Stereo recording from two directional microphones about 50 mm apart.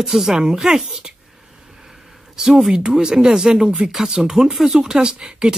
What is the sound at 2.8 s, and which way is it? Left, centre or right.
Speech, centre.